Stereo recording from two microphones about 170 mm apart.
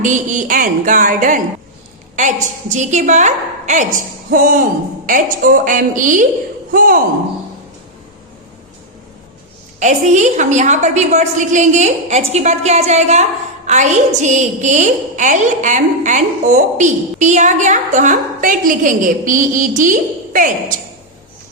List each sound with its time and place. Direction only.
0.0 s a woman's voice: 50° right (ahead or behind)
9.8 s a woman's voice: 45° right (ahead or behind)